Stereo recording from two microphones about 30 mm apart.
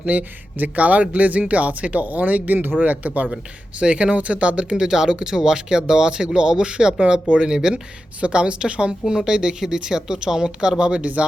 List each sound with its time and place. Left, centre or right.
0.1 s speech: right
2.0 s speech: right
2.8 s speech: right
3.3 s speech: right
4.8 s a woman's voice: right
8.2 s a woman's voice: right
10.9 s speech: right